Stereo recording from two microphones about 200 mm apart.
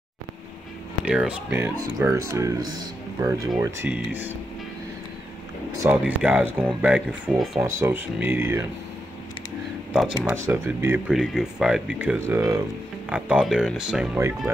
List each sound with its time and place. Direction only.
1.0 s speech: 5° right (ahead or behind)
5.8 s speech: 10° right (ahead or behind)
10.3 s speech: 15° right (ahead or behind)